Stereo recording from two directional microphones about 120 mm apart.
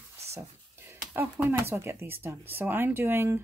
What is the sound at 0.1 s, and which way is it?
Speech, 20° right (ahead or behind).